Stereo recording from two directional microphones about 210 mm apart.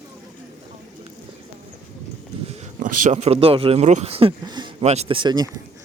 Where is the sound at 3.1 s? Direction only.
30° right (ahead or behind).